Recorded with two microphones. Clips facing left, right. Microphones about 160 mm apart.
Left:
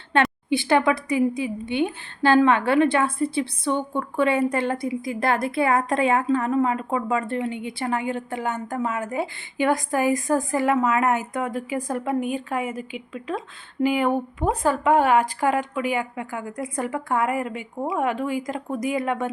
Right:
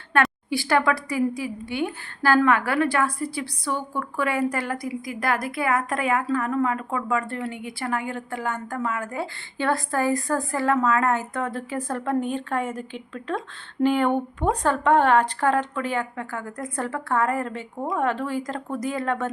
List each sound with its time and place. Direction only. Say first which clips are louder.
0.1 s a woman's voice: left 2 dB; 20° left (ahead or behind)